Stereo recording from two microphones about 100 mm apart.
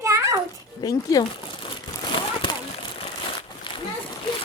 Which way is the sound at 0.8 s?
40° left (ahead or behind).